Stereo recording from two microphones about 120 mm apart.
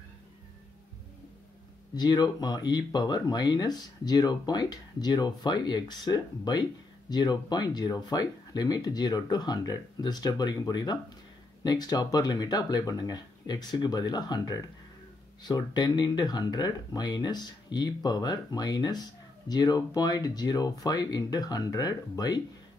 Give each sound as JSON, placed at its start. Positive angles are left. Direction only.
{"t": 2.0, "sound": "speech", "side_deg": 35}